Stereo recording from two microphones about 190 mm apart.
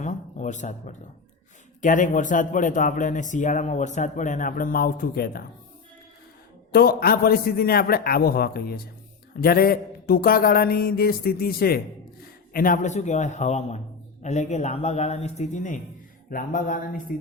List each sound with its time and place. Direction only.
0.0 s a sound: 40° left (ahead or behind)
1.8 s speech: 45° left (ahead or behind)
6.7 s a man's voice: 55° left (ahead or behind)